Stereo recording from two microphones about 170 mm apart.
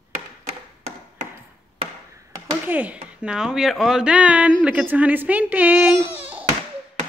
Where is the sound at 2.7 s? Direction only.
10° right (ahead or behind).